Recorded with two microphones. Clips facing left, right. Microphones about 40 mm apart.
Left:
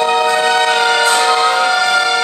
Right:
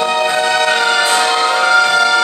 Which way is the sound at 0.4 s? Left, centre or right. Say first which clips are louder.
Left 1 dB; centre.